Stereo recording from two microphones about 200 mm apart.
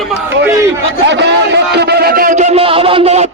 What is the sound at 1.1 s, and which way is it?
A man's voice, 60° right (ahead or behind).